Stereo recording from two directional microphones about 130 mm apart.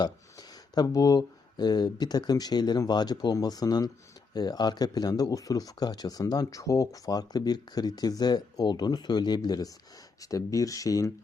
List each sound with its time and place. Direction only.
0.0 s speech: 30° left (ahead or behind)